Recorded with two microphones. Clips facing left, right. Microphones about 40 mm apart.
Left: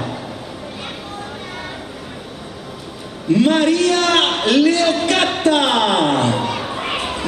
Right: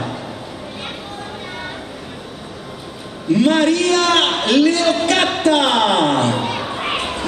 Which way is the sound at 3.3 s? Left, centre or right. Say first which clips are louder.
Even; centre.